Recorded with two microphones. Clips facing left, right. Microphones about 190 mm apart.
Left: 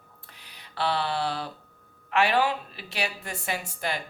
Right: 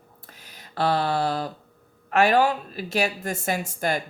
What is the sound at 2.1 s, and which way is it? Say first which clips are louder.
Speech: right 4 dB; 45° right (ahead or behind).